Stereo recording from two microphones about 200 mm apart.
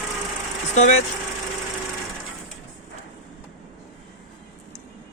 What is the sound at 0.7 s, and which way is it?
Vehicle, 35° left (ahead or behind).